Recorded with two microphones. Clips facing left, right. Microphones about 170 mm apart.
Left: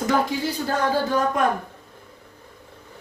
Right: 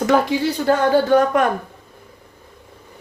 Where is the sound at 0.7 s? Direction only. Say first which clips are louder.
Right 8 dB; 70° right (ahead or behind).